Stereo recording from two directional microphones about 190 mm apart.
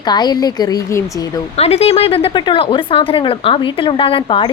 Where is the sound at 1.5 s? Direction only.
35° left (ahead or behind).